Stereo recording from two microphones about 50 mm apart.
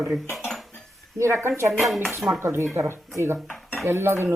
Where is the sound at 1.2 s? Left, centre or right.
Right.